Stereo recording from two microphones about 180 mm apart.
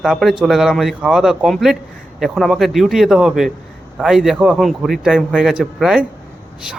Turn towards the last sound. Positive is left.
turn(degrees=-5)  # may be behind; listen again after turning